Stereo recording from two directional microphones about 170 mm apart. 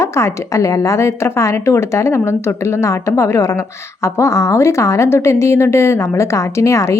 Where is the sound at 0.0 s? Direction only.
15° left (ahead or behind).